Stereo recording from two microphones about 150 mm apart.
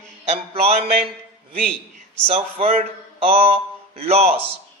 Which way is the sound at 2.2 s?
40° right (ahead or behind).